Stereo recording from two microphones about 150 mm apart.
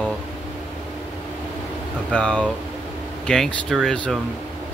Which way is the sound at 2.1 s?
5° left (ahead or behind).